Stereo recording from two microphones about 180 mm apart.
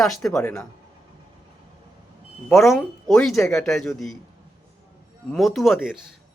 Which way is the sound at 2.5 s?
Centre (ahead or behind).